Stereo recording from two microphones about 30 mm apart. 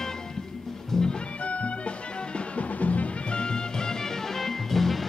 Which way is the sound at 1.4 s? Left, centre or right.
Left.